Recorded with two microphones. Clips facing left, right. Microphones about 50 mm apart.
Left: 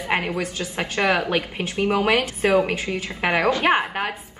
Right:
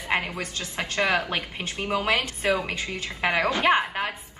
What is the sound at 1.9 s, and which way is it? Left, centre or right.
A woman's voice, left.